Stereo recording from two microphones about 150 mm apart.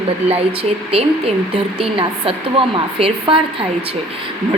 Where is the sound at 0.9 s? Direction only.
40° right (ahead or behind).